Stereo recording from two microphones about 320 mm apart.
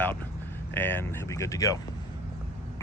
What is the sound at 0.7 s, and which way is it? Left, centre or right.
Speech, centre.